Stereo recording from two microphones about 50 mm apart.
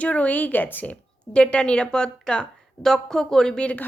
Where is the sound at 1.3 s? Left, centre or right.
Left.